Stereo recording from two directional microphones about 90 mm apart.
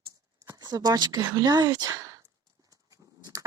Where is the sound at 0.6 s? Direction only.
45° right (ahead or behind).